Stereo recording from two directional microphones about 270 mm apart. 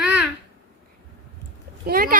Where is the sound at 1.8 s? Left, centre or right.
Right.